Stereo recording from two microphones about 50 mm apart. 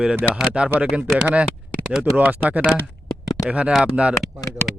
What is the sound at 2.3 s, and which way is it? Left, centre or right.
Speech, right.